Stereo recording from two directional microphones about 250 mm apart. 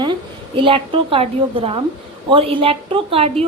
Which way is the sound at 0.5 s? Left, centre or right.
Right.